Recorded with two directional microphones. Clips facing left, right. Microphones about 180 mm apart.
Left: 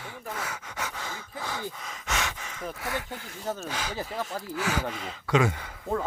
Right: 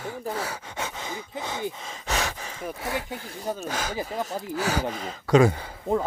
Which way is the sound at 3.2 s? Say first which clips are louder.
Right 4 dB; 35° right (ahead or behind).